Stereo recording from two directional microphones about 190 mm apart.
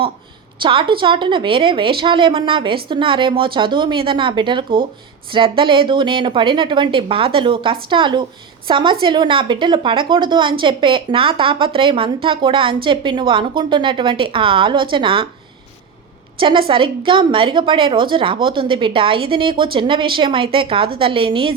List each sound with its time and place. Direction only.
0.6 s a woman's voice: 25° right (ahead or behind)
16.4 s a woman's voice: 25° right (ahead or behind)